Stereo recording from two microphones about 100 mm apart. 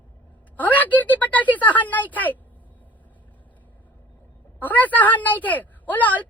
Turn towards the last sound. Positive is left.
turn(degrees=15)  # may be behind; listen again after turning